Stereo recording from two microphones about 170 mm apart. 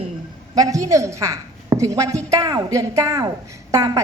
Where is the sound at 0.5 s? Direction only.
20° right (ahead or behind).